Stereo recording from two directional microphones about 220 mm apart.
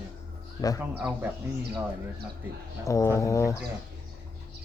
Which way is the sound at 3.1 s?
15° left (ahead or behind).